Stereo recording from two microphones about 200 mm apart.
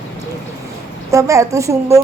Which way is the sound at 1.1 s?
15° right (ahead or behind).